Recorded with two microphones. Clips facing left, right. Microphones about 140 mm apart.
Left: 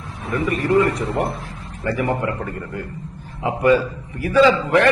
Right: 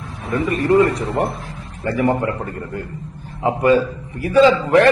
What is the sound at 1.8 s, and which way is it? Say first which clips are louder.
A man's voice: right 3 dB; 35° right (ahead or behind).